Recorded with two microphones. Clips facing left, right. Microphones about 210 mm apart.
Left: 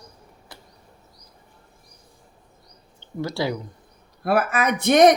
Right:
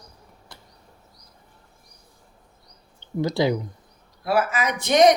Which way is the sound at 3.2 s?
20° right (ahead or behind).